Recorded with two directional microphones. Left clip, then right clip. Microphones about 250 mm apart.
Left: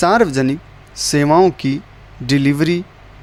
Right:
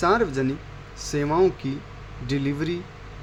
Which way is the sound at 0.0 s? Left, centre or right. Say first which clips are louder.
Left 8 dB; left.